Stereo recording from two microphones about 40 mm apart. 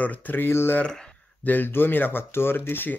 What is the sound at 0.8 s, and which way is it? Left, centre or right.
Speech, centre.